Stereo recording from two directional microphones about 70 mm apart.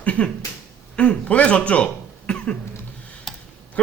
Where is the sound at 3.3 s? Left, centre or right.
Centre.